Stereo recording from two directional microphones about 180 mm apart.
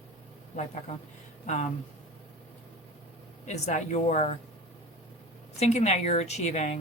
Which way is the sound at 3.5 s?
40° left (ahead or behind).